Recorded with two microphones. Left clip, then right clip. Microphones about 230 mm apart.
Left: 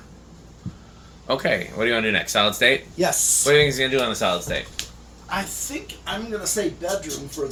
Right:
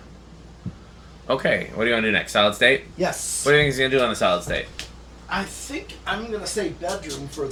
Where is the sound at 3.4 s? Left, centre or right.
Centre.